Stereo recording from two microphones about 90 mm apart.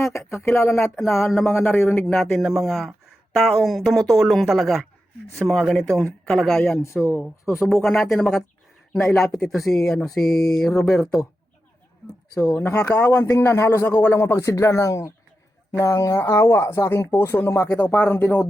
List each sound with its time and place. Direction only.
0.0 s speech: 35° left (ahead or behind)
1.3 s speech: 5° left (ahead or behind)
1.5 s speech: 25° left (ahead or behind)
2.0 s speech: 5° left (ahead or behind)
6.8 s a man's voice: 30° left (ahead or behind)
7.8 s speech: centre (ahead or behind)
13.0 s a man's voice: 25° left (ahead or behind)